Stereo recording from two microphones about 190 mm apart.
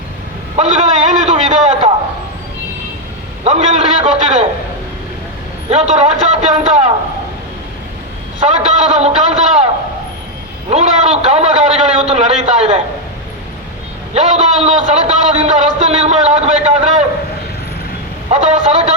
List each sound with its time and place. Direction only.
0.5 s a sound: 40° right (ahead or behind)
3.4 s a man's voice: 40° right (ahead or behind)
5.6 s a man's voice: 35° right (ahead or behind)
8.4 s a man's voice: 35° right (ahead or behind)
10.7 s a man's voice: 35° right (ahead or behind)
14.1 s a man's voice: 35° right (ahead or behind)
18.3 s a man's voice: 35° right (ahead or behind)